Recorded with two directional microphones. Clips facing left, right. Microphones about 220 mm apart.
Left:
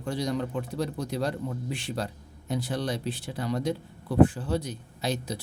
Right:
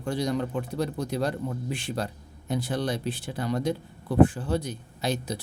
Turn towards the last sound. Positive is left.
turn(degrees=-55)  # may be behind; listen again after turning